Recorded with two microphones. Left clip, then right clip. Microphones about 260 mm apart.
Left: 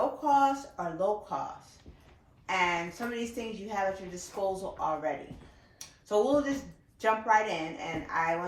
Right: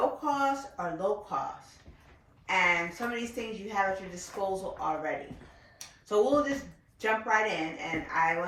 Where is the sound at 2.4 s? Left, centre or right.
Centre.